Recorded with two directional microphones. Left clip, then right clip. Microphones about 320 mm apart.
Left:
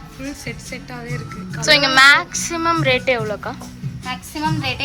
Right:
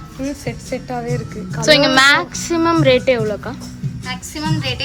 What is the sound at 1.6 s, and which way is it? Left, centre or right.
A woman's voice, centre.